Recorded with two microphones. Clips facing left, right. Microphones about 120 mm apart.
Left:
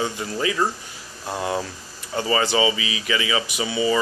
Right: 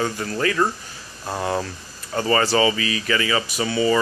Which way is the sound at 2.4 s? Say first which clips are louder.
Right 2 dB; 15° left (ahead or behind).